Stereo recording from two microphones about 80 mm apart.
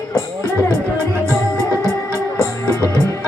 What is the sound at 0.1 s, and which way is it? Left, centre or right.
Music, left.